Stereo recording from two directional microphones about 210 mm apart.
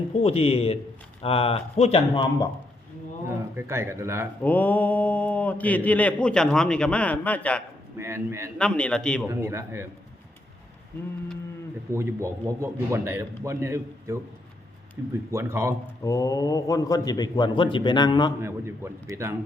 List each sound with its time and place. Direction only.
0.2 s a man's voice: 30° left (ahead or behind)
3.2 s a man's voice: 10° right (ahead or behind)
4.4 s speech: 10° left (ahead or behind)
7.9 s a man's voice: 10° right (ahead or behind)
8.5 s a man's voice: 5° left (ahead or behind)
9.2 s a man's voice: 10° right (ahead or behind)
11.9 s a man's voice: 15° right (ahead or behind)
15.3 s a man's voice: 10° right (ahead or behind)
16.0 s a man's voice: 15° left (ahead or behind)
18.4 s a man's voice: 10° right (ahead or behind)